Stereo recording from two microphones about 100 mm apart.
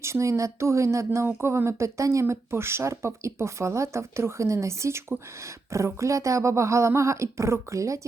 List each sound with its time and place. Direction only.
0.0 s speech: 30° right (ahead or behind)